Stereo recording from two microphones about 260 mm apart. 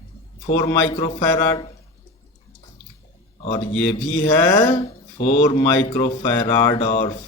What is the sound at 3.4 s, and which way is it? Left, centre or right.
Speech, left.